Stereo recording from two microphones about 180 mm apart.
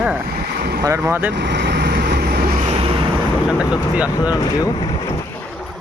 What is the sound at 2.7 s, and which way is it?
Vehicle, 30° right (ahead or behind).